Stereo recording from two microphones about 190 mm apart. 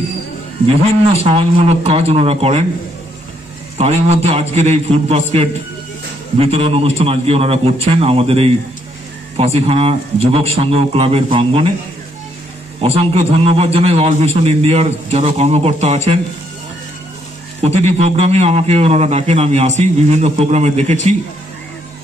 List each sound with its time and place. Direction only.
1.1 s a man's voice: 30° right (ahead or behind)
3.7 s a man's voice: 35° right (ahead or behind)
12.8 s a man's voice: 30° right (ahead or behind)
17.6 s a man's voice: 35° right (ahead or behind)